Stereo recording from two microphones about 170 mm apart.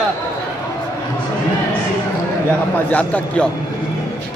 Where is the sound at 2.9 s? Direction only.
5° left (ahead or behind).